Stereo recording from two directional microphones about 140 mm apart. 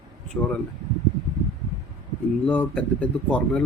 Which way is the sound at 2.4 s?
10° left (ahead or behind).